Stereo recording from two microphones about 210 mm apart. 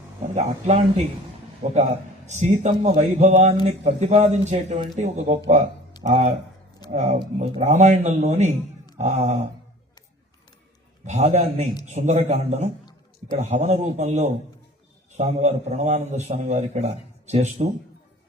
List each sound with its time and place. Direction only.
0.3 s a man's voice: 35° right (ahead or behind)
11.0 s a man's voice: 35° right (ahead or behind)